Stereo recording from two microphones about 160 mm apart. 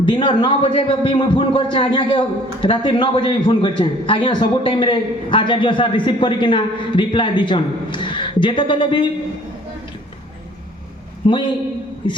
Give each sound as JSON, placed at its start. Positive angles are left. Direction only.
{"t": 0.0, "sound": "a man's voice", "side_deg": 30}
{"t": 11.2, "sound": "a man's voice", "side_deg": 30}